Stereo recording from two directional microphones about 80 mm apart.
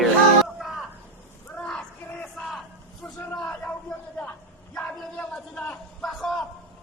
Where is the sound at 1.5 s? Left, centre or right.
Centre.